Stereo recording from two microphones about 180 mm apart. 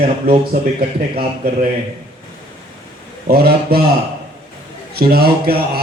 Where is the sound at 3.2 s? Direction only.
60° right (ahead or behind).